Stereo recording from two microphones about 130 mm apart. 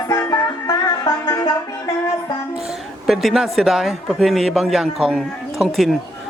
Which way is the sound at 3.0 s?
Centre (ahead or behind).